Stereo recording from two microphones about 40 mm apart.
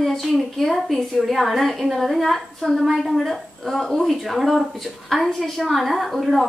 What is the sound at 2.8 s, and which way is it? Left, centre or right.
Speech, centre.